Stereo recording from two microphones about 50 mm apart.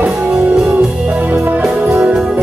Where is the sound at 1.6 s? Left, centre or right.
Centre.